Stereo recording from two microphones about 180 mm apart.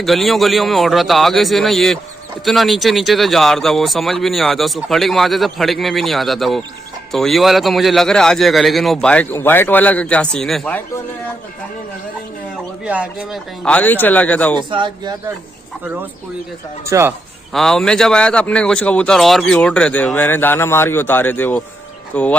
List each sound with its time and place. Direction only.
0.0 s speech: centre (ahead or behind)
12.8 s speech: 5° right (ahead or behind)
13.7 s speech: 10° left (ahead or behind)
14.7 s speech: 25° right (ahead or behind)
16.9 s speech: 15° right (ahead or behind)
17.5 s speech: centre (ahead or behind)